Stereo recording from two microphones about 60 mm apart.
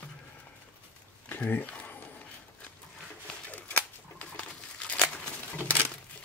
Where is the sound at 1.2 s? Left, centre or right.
Left.